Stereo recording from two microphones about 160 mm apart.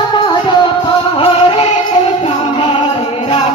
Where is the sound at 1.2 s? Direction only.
35° left (ahead or behind).